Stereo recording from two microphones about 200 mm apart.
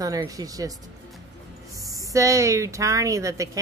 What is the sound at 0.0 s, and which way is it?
Speech, 15° right (ahead or behind).